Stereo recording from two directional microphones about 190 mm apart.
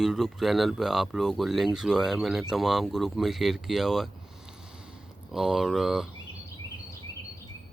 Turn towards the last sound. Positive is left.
turn(degrees=0)  # may be behind; listen again after turning